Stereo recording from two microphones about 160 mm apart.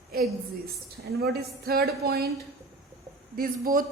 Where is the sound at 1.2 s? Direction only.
75° right (ahead or behind).